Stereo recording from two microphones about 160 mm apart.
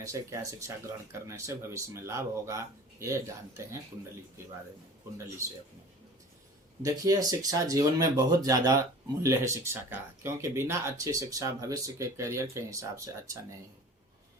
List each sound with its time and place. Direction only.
0.0 s speech: 20° right (ahead or behind)
6.8 s speech: 20° right (ahead or behind)